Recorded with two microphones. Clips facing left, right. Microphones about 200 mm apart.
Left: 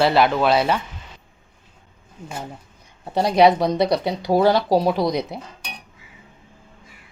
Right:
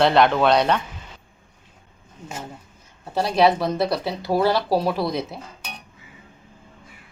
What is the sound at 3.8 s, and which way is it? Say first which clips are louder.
Speech: left 3 dB; 20° left (ahead or behind).